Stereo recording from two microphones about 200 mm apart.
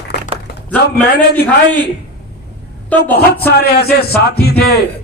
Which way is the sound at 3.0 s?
50° left (ahead or behind).